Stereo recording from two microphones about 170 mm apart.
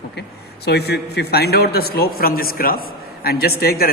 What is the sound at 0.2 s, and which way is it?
A man's voice, 75° left (ahead or behind).